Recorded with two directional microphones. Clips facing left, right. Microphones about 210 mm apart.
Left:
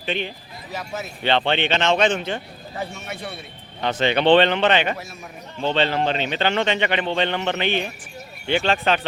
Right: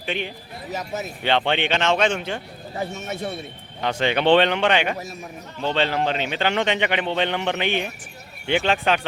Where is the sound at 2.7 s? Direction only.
40° right (ahead or behind).